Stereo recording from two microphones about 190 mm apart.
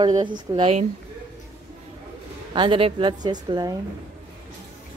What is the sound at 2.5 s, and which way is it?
A woman's voice, 25° right (ahead or behind).